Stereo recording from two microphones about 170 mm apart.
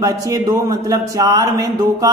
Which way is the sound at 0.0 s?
20° right (ahead or behind).